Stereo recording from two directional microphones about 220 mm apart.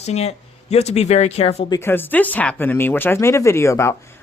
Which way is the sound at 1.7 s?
10° left (ahead or behind).